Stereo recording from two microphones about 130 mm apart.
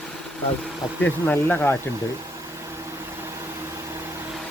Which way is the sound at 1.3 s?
15° left (ahead or behind).